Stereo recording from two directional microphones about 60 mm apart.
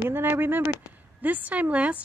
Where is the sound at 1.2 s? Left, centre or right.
Right.